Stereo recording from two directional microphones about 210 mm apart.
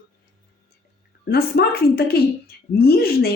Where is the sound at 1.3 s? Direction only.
50° left (ahead or behind).